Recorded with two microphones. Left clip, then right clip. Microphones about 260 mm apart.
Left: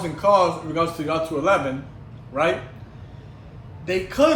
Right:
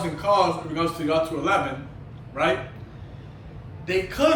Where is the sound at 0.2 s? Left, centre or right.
Centre.